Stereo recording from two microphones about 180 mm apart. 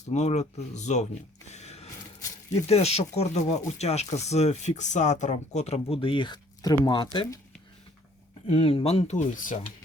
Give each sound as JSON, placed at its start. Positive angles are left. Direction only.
{"t": 0.0, "sound": "speech", "side_deg": 40}
{"t": 1.5, "sound": "a sound", "side_deg": 40}
{"t": 2.6, "sound": "speech", "side_deg": 35}
{"t": 8.4, "sound": "speech", "side_deg": 35}